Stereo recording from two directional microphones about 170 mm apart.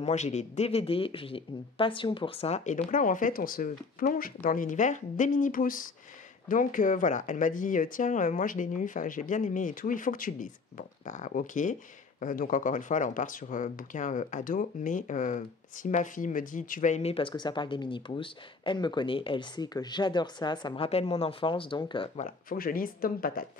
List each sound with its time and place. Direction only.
0.0 s speech: 40° left (ahead or behind)
22.2 s speech: 55° left (ahead or behind)